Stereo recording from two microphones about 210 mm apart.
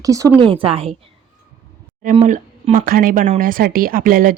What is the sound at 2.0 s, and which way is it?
A woman's voice, 35° right (ahead or behind).